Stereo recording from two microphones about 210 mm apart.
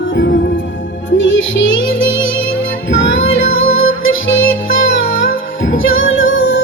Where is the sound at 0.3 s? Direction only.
45° left (ahead or behind).